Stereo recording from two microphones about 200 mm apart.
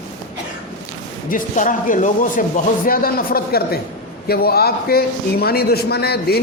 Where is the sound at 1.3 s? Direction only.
40° left (ahead or behind).